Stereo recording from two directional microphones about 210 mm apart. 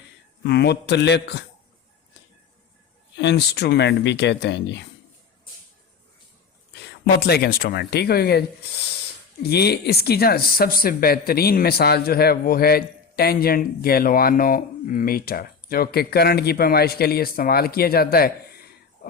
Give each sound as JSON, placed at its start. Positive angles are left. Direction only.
{"t": 0.4, "sound": "speech", "side_deg": 50}
{"t": 3.2, "sound": "speech", "side_deg": 55}
{"t": 7.0, "sound": "speech", "side_deg": 50}